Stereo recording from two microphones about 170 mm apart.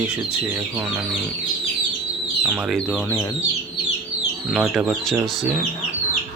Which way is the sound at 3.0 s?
20° left (ahead or behind).